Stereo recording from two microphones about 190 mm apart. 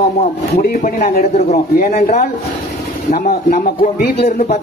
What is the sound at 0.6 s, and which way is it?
Speech, 45° left (ahead or behind).